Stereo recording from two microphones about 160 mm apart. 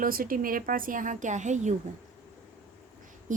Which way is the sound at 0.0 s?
60° right (ahead or behind).